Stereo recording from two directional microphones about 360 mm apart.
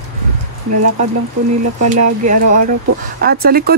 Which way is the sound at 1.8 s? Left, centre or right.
Right.